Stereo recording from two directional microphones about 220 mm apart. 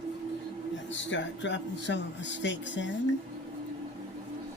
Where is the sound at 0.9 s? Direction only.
55° left (ahead or behind).